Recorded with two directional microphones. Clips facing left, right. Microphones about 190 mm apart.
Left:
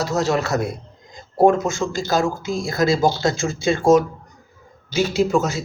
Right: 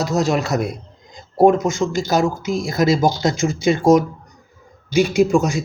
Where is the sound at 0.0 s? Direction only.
20° right (ahead or behind).